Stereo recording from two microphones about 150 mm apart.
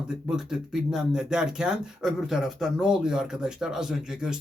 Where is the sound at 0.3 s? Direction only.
5° right (ahead or behind).